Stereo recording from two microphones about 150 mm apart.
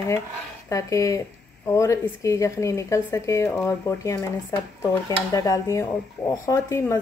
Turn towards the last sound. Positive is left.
turn(degrees=20)  # may be behind; listen again after turning